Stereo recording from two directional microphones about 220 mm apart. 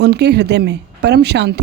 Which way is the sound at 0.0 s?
50° right (ahead or behind).